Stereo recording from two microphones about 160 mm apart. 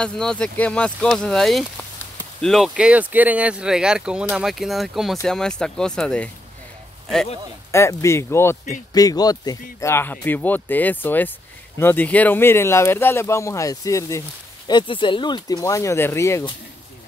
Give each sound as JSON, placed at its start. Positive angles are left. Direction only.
{"t": 0.0, "sound": "speech", "side_deg": 5}
{"t": 7.7, "sound": "speech", "side_deg": 15}